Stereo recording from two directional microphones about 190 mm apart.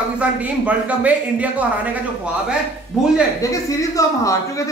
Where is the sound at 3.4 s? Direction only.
15° left (ahead or behind).